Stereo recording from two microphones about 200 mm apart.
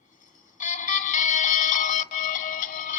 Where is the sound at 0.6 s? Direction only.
40° left (ahead or behind).